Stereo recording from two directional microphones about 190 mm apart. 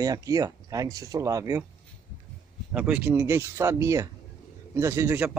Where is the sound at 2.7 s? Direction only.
5° right (ahead or behind).